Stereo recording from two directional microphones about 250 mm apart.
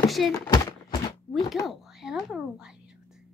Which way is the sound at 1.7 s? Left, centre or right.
Centre.